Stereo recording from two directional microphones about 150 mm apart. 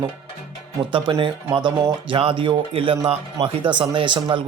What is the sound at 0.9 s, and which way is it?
Speech, 35° right (ahead or behind).